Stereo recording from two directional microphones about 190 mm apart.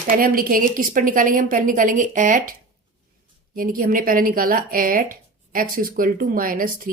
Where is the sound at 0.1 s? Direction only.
50° right (ahead or behind).